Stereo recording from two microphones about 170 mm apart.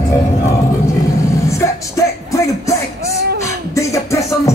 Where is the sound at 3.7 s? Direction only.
20° left (ahead or behind).